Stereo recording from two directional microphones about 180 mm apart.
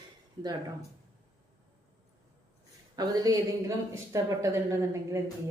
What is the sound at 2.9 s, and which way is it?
A woman's voice, 20° right (ahead or behind).